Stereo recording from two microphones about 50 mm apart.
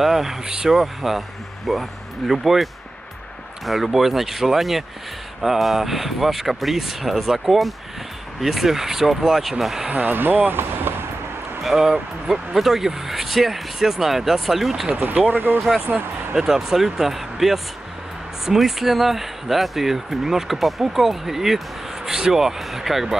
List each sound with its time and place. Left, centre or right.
0.0 s speech: centre
9.8 s speech: right
10.1 s speech: right
11.6 s speech: centre
14.9 s speech: right
15.9 s speech: right
16.3 s speech: centre